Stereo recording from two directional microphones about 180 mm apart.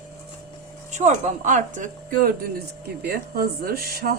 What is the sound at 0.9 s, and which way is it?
Speech, 40° right (ahead or behind).